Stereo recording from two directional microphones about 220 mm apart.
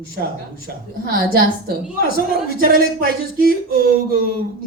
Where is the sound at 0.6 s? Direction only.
45° right (ahead or behind).